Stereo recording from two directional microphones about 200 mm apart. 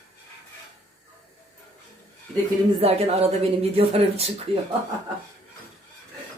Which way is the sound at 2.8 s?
30° right (ahead or behind).